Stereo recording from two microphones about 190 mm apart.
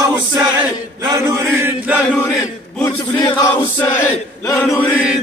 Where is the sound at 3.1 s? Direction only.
25° left (ahead or behind).